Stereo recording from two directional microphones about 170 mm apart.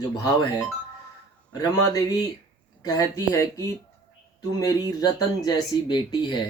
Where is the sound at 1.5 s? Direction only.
20° left (ahead or behind).